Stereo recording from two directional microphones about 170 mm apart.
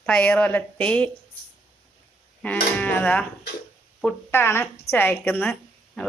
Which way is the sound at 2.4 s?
10° left (ahead or behind).